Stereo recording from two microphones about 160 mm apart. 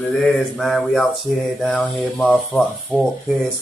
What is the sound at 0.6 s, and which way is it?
Speech, centre (ahead or behind).